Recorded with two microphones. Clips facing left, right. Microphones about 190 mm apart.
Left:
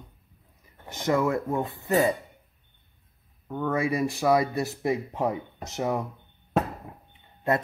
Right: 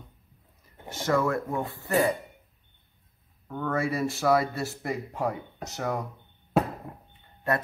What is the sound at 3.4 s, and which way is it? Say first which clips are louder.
Speech: left 2 dB; 15° left (ahead or behind).